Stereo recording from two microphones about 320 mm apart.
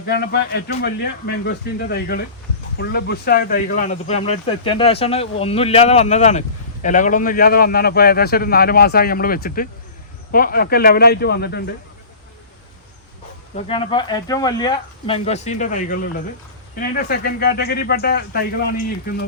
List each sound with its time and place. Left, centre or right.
0.1 s speech: left
13.6 s speech: centre